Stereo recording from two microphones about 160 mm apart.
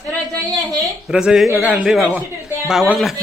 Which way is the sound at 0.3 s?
25° right (ahead or behind).